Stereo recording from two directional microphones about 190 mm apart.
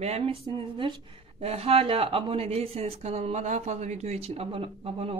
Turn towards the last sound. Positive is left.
turn(degrees=-30)  # may be behind; listen again after turning